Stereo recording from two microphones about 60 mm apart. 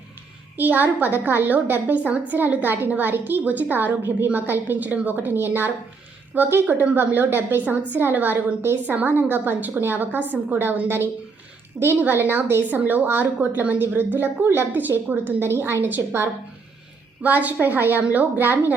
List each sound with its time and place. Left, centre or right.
0.5 s a woman's voice: right
17.2 s a woman's voice: right